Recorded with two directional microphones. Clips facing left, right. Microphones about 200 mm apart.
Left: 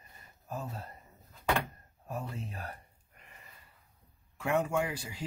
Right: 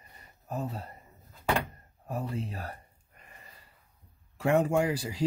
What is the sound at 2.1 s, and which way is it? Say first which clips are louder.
Speech: right 5 dB; 35° right (ahead or behind).